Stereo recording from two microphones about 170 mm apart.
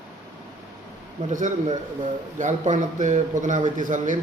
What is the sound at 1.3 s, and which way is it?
A man's voice, 45° right (ahead or behind).